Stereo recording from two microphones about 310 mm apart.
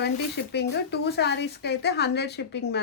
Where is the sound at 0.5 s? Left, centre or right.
Left.